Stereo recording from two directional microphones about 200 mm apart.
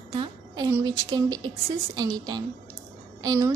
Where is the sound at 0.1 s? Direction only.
25° right (ahead or behind).